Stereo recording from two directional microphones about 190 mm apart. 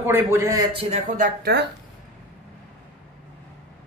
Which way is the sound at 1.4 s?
60° right (ahead or behind).